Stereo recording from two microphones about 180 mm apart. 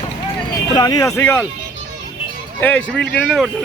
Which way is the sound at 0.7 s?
20° left (ahead or behind).